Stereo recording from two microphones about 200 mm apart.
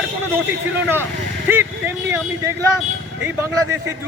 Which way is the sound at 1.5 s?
10° right (ahead or behind).